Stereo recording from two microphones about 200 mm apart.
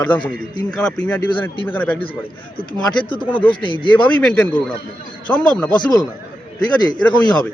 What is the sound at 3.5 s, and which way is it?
Speech, 25° left (ahead or behind).